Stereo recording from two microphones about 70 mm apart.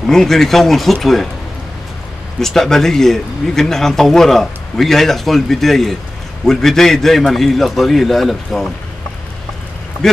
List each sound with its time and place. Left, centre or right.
0.1 s speech: centre
2.4 s speech: centre